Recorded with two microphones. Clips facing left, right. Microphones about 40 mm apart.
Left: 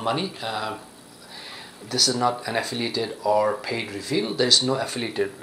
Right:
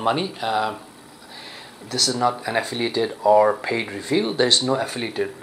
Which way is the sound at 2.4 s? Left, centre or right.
Centre.